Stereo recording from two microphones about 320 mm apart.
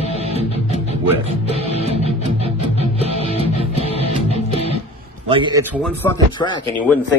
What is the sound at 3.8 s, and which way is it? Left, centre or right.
Music, centre.